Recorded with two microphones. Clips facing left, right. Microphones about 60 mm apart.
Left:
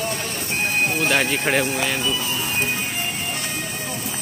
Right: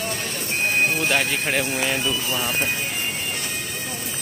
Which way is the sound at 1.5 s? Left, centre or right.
Centre.